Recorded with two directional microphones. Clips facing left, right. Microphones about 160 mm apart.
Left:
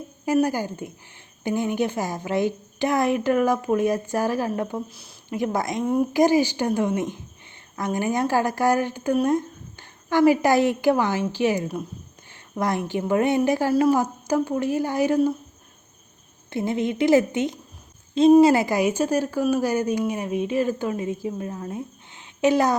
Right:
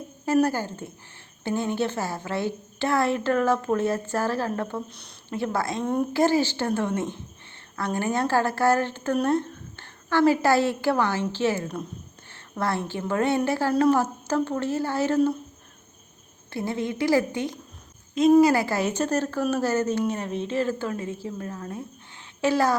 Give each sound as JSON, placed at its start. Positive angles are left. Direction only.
{"t": 0.4, "sound": "a woman's voice", "side_deg": 15}
{"t": 5.4, "sound": "a woman's voice", "side_deg": 15}
{"t": 5.8, "sound": "speech", "side_deg": 5}
{"t": 6.1, "sound": "a woman's voice", "side_deg": 15}
{"t": 16.5, "sound": "a woman's voice", "side_deg": 20}